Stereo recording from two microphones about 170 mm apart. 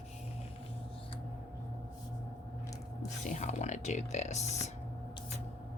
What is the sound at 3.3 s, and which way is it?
Speech, 45° left (ahead or behind).